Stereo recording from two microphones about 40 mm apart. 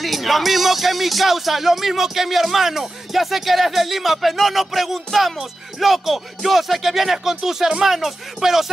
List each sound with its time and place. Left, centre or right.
0.0 s speech: centre